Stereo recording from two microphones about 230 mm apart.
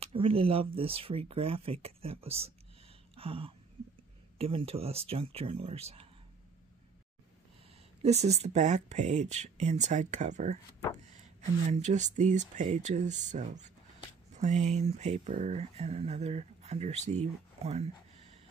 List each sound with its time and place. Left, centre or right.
0.0 s speech: right
3.2 s a sound: right
4.4 s speech: right
8.0 s speech: right
11.8 s speech: right